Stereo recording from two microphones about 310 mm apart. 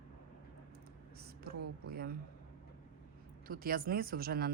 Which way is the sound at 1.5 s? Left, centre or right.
Right.